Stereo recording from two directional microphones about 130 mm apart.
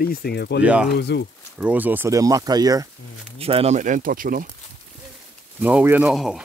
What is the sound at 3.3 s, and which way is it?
Speech, 50° right (ahead or behind).